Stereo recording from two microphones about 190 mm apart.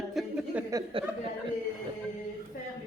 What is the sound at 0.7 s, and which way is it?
Speech, 20° right (ahead or behind).